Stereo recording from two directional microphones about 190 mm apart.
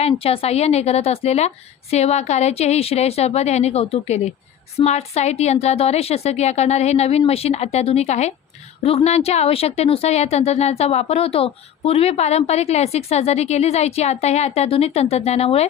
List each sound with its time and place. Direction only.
0.0 s a woman's voice: 30° left (ahead or behind)